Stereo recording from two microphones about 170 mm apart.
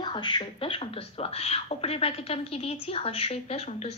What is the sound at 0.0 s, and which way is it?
Speech, 25° left (ahead or behind).